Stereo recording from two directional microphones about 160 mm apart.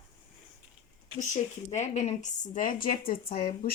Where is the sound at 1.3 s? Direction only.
45° left (ahead or behind); by 3.7 s 65° left (ahead or behind).